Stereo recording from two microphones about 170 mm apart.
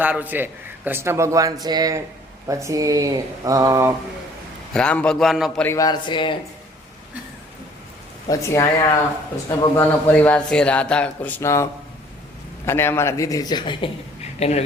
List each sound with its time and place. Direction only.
0.0 s a man's voice: 10° right (ahead or behind)
4.7 s a man's voice: 5° left (ahead or behind)
5.6 s speech: 20° left (ahead or behind)
8.3 s a man's voice: 20° left (ahead or behind); by 14.6 s 40° left (ahead or behind)